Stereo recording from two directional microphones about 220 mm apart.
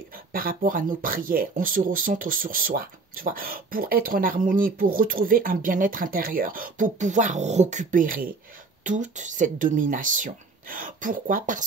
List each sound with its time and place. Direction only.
0.3 s speech: 40° right (ahead or behind)